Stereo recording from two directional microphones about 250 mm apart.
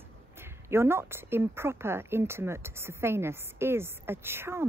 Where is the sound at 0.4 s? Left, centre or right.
Centre.